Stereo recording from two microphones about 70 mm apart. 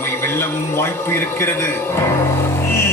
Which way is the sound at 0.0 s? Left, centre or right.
Left.